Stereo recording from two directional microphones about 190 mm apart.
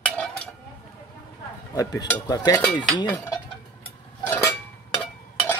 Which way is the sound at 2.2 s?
20° left (ahead or behind).